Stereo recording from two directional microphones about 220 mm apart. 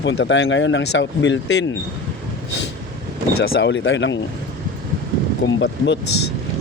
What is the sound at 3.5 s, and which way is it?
Speech, 55° left (ahead or behind).